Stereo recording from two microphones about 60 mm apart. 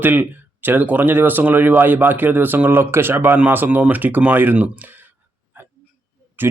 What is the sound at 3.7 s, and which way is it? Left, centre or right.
Speech, right.